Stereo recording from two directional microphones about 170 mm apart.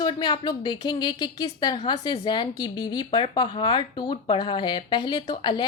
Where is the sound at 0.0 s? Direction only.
25° left (ahead or behind).